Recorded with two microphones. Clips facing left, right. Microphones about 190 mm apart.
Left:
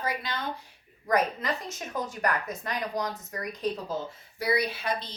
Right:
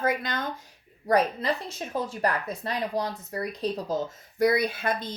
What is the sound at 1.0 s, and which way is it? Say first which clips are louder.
Speech: right 3 dB; 35° right (ahead or behind).